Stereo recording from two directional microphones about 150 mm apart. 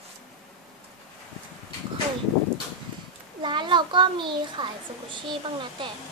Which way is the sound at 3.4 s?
30° right (ahead or behind).